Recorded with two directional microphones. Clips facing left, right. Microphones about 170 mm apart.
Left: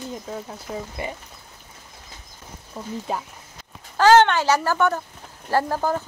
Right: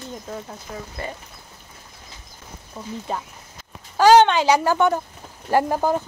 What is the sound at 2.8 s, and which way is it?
Speech, centre (ahead or behind).